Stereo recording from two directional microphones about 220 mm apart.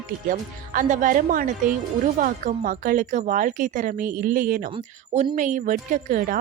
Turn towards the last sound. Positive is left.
turn(degrees=-35)  # may be behind; listen again after turning